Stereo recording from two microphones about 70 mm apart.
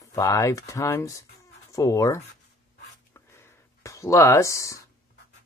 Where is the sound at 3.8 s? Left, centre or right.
Left.